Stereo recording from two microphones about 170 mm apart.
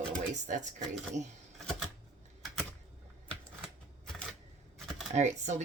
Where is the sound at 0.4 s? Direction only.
45° right (ahead or behind).